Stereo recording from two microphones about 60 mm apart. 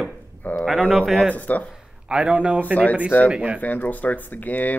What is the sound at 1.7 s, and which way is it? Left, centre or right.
Speech, centre.